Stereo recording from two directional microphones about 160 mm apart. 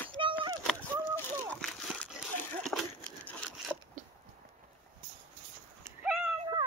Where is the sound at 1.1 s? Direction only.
5° left (ahead or behind).